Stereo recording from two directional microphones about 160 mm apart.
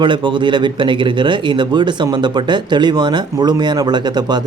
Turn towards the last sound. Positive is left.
turn(degrees=-25)  # may be behind; listen again after turning